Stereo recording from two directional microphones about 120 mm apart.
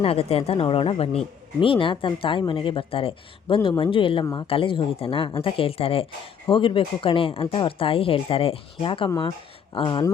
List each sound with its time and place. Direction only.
0.0 s speech: 55° left (ahead or behind)
9.0 s speech: 30° left (ahead or behind)
9.7 s speech: 45° left (ahead or behind)